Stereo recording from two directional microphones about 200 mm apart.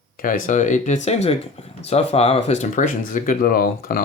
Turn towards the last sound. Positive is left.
turn(degrees=45)  # may be behind; listen again after turning